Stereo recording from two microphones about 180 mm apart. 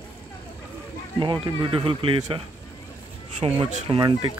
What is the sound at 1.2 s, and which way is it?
Speech, 25° right (ahead or behind).